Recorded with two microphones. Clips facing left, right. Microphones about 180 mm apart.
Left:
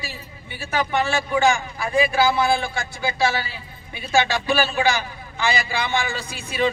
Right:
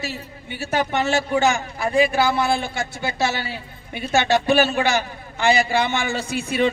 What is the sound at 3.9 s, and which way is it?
Speech, 55° right (ahead or behind).